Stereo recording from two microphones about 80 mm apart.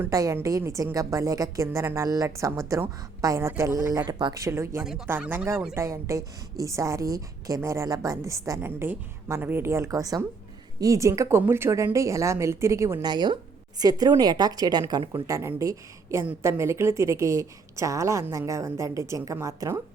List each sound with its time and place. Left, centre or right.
0.1 s a woman's voice: right
8.6 s a woman's voice: right
13.0 s a woman's voice: right
15.4 s a woman's voice: right